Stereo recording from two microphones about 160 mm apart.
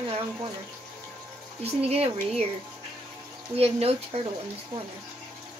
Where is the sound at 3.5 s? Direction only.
40° right (ahead or behind).